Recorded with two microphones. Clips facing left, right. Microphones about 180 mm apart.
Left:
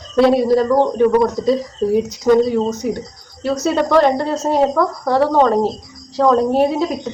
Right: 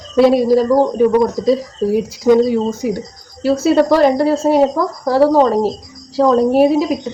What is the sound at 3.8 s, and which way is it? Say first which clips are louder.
Speech: even; 35° right (ahead or behind).